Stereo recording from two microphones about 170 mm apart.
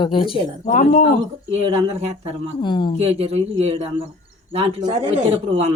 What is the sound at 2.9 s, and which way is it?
Speech, 35° right (ahead or behind).